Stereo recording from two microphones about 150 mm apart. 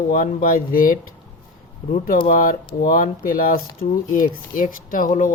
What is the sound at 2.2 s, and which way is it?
Speech, 65° left (ahead or behind).